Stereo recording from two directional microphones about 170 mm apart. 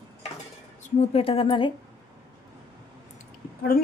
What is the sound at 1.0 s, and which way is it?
Speech, 35° left (ahead or behind).